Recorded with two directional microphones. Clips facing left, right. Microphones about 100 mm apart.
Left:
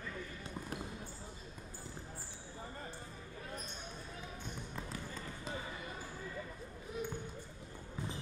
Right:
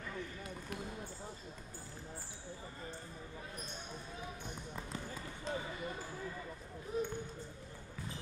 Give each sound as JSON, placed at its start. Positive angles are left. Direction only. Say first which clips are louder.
{"t": 5.5, "sound": "basketball bounce", "louder": "right 4 dB", "side_deg": 5}
{"t": 6.9, "sound": "basketball bounce", "louder": "right 4 dB", "side_deg": -40}